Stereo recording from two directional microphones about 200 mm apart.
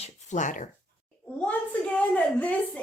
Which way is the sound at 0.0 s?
35° left (ahead or behind).